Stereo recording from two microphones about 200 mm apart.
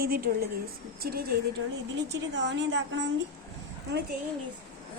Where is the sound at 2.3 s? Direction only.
65° right (ahead or behind).